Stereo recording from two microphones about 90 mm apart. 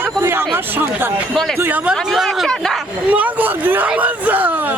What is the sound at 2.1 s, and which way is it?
Speech, centre (ahead or behind).